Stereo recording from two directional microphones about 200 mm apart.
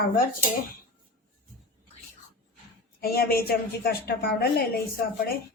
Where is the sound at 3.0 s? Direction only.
50° left (ahead or behind).